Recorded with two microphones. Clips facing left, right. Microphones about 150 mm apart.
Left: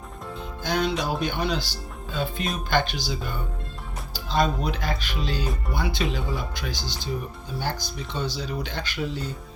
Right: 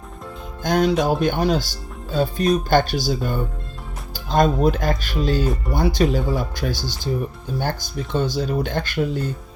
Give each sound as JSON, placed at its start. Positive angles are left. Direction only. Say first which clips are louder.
{"t": 0.6, "sound": "speech", "louder": "right 7 dB", "side_deg": -45}